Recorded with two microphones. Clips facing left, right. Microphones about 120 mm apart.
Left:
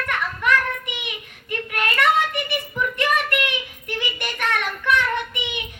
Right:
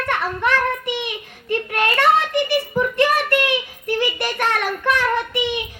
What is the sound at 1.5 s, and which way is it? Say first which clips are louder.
Child singing: right 5 dB; 30° right (ahead or behind).